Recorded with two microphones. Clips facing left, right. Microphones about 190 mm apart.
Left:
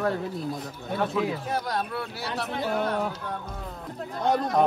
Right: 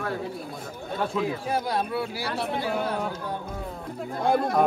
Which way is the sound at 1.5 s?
5° right (ahead or behind).